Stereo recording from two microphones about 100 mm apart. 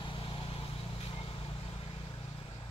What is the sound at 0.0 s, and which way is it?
Vehicle, 55° left (ahead or behind).